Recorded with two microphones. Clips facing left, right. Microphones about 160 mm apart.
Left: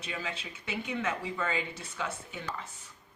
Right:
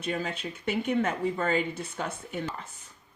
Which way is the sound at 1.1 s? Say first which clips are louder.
Right 6 dB; 40° right (ahead or behind).